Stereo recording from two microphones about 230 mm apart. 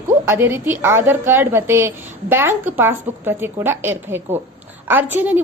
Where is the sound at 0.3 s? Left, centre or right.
Centre.